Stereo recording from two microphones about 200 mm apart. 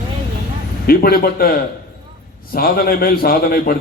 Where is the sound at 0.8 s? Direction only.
50° left (ahead or behind).